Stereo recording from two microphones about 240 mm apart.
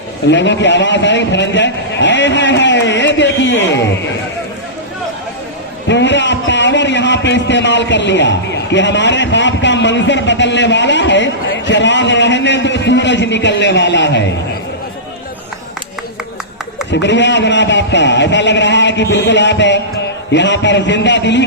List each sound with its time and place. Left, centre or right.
0.3 s a man's voice: left
5.9 s a man's voice: left
16.9 s a man's voice: left